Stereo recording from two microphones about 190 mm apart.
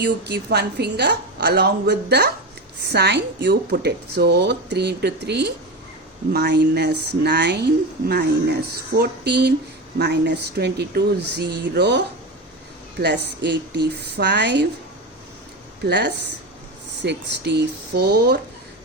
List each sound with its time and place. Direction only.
0.0 s speech: 65° right (ahead or behind)
15.8 s speech: 65° right (ahead or behind)